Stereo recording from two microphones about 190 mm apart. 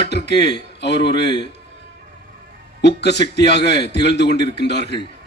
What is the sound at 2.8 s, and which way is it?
A man's voice, 65° left (ahead or behind).